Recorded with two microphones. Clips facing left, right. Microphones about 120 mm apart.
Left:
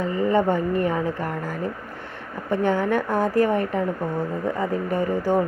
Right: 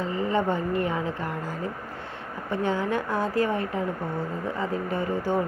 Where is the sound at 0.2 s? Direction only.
50° left (ahead or behind).